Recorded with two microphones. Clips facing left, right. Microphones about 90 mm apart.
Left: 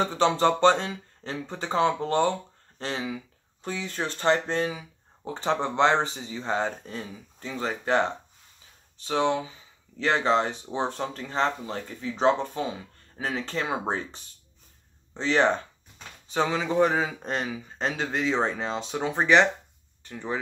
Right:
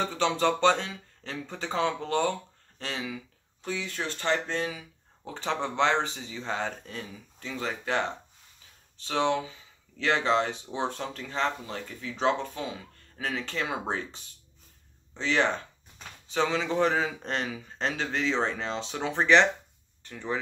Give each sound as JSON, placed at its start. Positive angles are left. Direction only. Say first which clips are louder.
{"t": 0.0, "sound": "speech", "louder": "left 4 dB", "side_deg": 30}
{"t": 4.7, "sound": "speech", "louder": "left 3 dB", "side_deg": 20}
{"t": 9.0, "sound": "speech", "louder": "left 2 dB", "side_deg": 15}
{"t": 13.8, "sound": "speech", "louder": "left 3 dB", "side_deg": 40}
{"t": 15.1, "sound": "speech", "louder": "left 4 dB", "side_deg": 25}
{"t": 16.3, "sound": "speech", "louder": "left 3 dB", "side_deg": 10}